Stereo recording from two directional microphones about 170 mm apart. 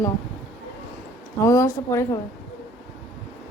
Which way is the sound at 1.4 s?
20° left (ahead or behind).